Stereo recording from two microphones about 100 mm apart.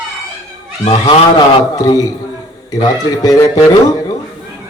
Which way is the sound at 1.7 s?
40° left (ahead or behind).